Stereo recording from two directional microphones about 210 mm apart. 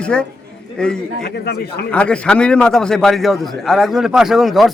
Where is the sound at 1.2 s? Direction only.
50° left (ahead or behind).